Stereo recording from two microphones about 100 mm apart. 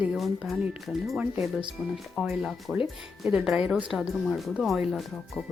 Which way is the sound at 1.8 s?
15° right (ahead or behind).